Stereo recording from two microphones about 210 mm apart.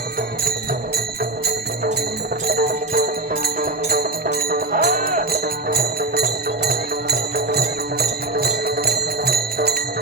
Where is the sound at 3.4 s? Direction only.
45° right (ahead or behind).